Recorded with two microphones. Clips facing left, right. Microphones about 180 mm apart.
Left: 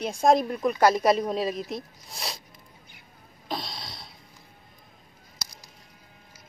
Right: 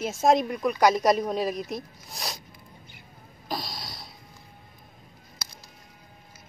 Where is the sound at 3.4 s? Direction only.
Centre (ahead or behind).